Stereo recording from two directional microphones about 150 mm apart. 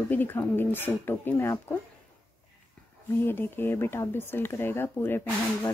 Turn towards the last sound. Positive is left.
turn(degrees=15)  # may be behind; listen again after turning